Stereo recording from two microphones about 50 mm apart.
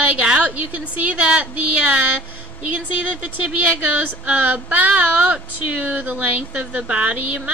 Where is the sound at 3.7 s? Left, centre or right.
Right.